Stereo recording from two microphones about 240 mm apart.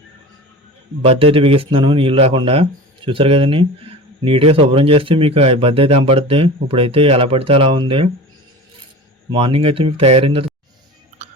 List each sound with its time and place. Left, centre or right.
1.0 s speech: right
9.3 s speech: right
11.2 s chewing: right